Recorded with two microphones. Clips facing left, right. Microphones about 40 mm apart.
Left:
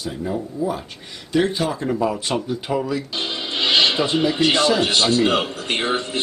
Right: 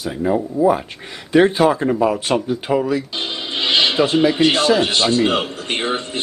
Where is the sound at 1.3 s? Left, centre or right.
Right.